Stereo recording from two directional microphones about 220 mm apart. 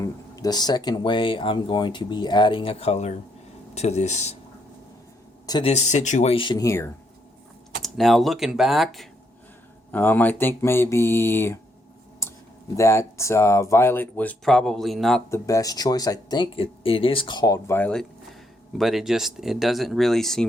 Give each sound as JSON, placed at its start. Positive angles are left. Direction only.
{"t": 0.0, "sound": "speech", "side_deg": 15}
{"t": 5.5, "sound": "speech", "side_deg": 25}
{"t": 7.8, "sound": "speech", "side_deg": 0}
{"t": 12.2, "sound": "a sound", "side_deg": 10}
{"t": 12.7, "sound": "speech", "side_deg": 15}
{"t": 15.3, "sound": "speech", "side_deg": 15}